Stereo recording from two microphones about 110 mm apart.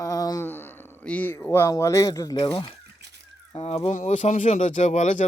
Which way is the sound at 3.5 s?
70° left (ahead or behind).